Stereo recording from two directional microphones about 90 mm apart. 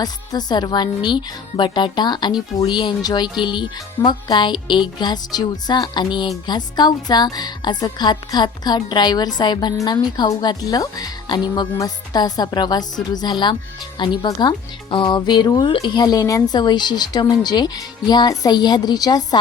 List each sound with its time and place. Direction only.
0.0 s a woman's voice: 50° left (ahead or behind)
14.3 s speech: 45° left (ahead or behind)
14.8 s speech: 65° left (ahead or behind); by 19.4 s 50° left (ahead or behind)